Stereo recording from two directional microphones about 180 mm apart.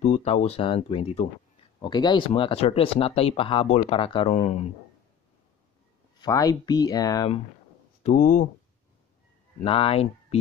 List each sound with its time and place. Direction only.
0.0 s speech: 35° left (ahead or behind)
6.1 s speech: 20° left (ahead or behind)
8.0 s speech: 45° left (ahead or behind)
9.7 s speech: 30° left (ahead or behind)